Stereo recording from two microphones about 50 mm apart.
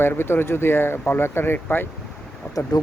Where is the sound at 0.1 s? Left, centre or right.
Left.